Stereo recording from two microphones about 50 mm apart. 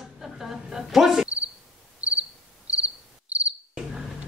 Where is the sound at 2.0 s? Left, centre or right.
Right.